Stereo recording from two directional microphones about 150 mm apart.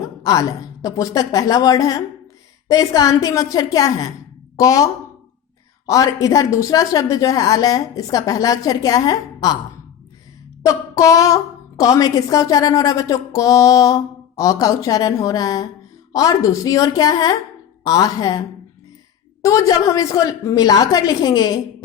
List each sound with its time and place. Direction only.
0.0 s a woman's voice: 20° left (ahead or behind)
10.6 s a woman's voice: 20° left (ahead or behind)